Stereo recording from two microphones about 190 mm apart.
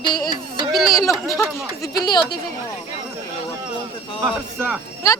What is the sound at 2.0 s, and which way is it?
Speech, 20° left (ahead or behind).